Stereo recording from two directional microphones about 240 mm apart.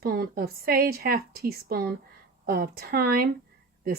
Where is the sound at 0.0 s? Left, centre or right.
Right.